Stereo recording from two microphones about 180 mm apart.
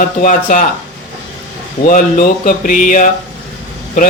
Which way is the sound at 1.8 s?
50° left (ahead or behind).